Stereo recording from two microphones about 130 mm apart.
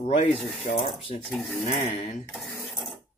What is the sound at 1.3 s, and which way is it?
Speech, centre (ahead or behind).